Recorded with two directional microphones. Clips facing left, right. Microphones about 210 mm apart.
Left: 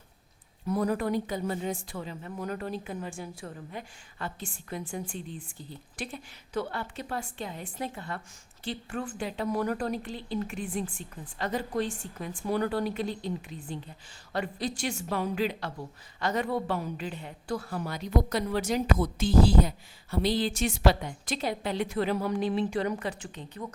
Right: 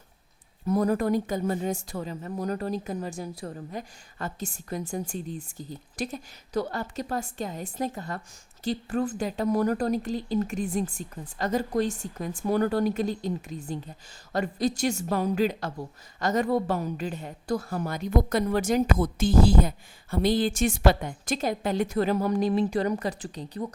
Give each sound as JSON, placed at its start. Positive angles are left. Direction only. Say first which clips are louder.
{"t": 0.7, "sound": "a woman's voice", "louder": "right 4 dB", "side_deg": -45}